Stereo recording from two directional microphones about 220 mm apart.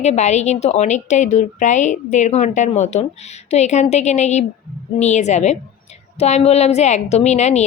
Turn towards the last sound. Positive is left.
turn(degrees=30)  # may be behind; listen again after turning